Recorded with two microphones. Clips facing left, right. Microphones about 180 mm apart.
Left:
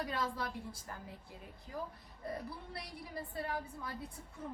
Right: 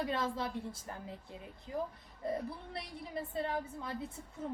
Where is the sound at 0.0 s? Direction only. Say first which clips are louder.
Right 3 dB; 25° right (ahead or behind).